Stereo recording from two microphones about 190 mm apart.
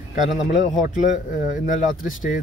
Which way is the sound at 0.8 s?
40° left (ahead or behind).